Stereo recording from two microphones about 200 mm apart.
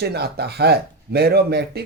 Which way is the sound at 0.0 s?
55° right (ahead or behind).